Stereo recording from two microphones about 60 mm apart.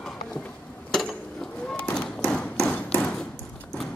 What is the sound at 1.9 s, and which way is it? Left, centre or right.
Thump, centre.